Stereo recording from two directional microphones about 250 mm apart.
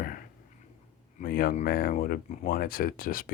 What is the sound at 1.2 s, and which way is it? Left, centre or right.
Speech, left.